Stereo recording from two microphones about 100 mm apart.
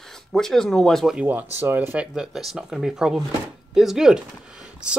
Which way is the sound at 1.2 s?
20° right (ahead or behind).